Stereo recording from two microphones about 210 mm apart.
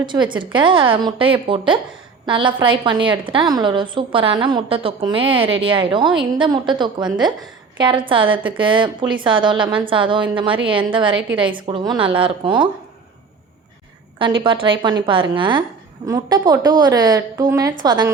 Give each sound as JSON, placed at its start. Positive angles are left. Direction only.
{"t": 0.0, "sound": "a woman's voice", "side_deg": -20}
{"t": 14.2, "sound": "a woman's voice", "side_deg": -25}